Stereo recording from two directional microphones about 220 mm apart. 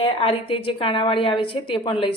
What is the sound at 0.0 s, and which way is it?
A woman's voice, 25° left (ahead or behind).